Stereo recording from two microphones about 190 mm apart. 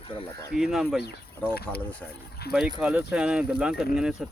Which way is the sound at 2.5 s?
5° right (ahead or behind).